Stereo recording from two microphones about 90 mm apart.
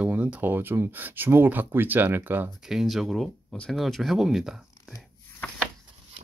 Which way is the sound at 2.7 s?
5° right (ahead or behind).